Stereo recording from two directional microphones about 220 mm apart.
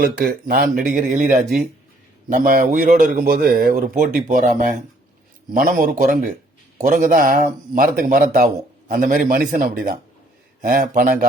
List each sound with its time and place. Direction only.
0.0 s speech: 40° right (ahead or behind)